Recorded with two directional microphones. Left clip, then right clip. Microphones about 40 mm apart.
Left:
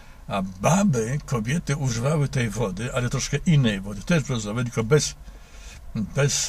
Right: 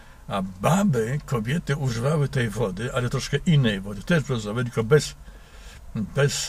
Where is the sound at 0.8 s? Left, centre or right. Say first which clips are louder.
Even; right.